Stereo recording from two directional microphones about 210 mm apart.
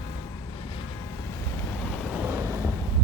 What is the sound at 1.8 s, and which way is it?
Vehicle, 5° left (ahead or behind).